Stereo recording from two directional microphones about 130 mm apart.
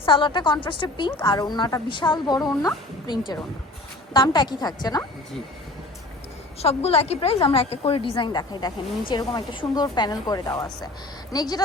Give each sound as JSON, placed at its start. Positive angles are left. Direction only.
{"t": 0.0, "sound": "a woman's voice", "side_deg": 40}
{"t": 6.6, "sound": "a woman's voice", "side_deg": 50}